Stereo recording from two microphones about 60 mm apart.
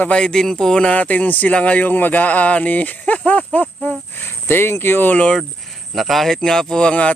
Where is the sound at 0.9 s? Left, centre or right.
Left.